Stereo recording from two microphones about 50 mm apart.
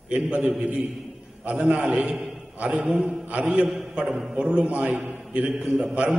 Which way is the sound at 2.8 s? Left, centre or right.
Centre.